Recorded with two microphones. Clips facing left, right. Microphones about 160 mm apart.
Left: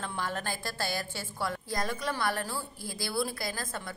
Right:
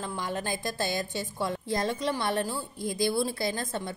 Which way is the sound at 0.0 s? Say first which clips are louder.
Right 2 dB; 15° right (ahead or behind).